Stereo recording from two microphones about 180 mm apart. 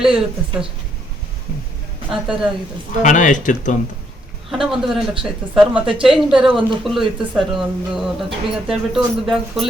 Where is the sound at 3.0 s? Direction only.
45° left (ahead or behind).